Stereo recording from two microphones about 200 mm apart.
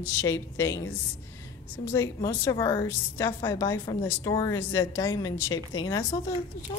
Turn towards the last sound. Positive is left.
turn(degrees=20)  # may be behind; listen again after turning